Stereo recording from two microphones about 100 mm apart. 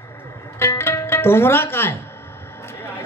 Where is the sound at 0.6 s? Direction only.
25° left (ahead or behind).